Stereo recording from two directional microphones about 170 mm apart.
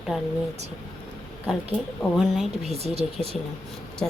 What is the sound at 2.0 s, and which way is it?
Speech, centre (ahead or behind).